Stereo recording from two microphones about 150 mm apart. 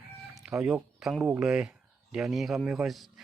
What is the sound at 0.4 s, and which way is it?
Speech, 5° right (ahead or behind).